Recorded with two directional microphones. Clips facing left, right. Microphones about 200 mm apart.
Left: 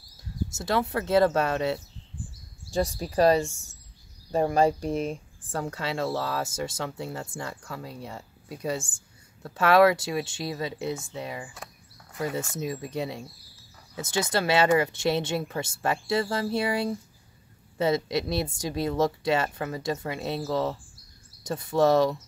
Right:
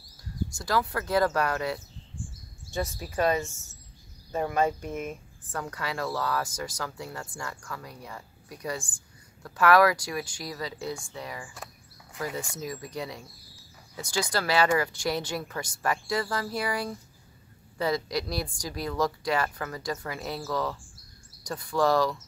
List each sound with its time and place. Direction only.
0.6 s speech: 25° left (ahead or behind)
3.0 s a woman's voice: 35° left (ahead or behind)
3.4 s speech: 15° left (ahead or behind)
4.3 s speech: 35° left (ahead or behind)